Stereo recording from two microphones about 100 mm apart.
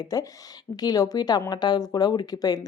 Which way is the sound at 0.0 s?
40° left (ahead or behind).